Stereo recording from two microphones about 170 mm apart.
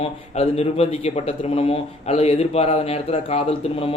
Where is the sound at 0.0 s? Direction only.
35° left (ahead or behind).